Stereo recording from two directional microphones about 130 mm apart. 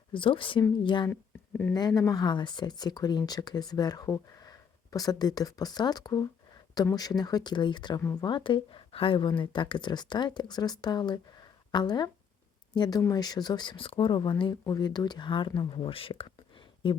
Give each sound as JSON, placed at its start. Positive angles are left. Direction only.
{"t": 0.1, "sound": "speech", "side_deg": 40}
{"t": 1.1, "sound": "a sound", "side_deg": 10}
{"t": 2.0, "sound": "speech", "side_deg": 30}